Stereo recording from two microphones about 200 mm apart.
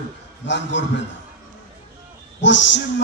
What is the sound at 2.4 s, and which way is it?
Speech, 65° left (ahead or behind).